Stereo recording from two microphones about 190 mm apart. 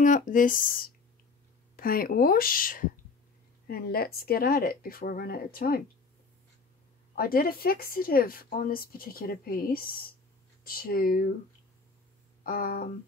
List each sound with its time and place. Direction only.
0.0 s a woman's voice: 45° left (ahead or behind)
7.2 s a woman's voice: 50° left (ahead or behind)
12.4 s a woman's voice: 50° left (ahead or behind)